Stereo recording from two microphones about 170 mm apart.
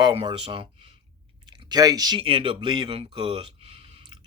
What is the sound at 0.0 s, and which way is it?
Speech, 30° right (ahead or behind).